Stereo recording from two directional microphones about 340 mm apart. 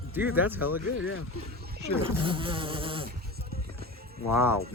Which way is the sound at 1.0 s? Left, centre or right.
Left.